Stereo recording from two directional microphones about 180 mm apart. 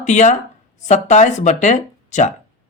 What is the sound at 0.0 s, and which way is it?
Speech, 40° left (ahead or behind).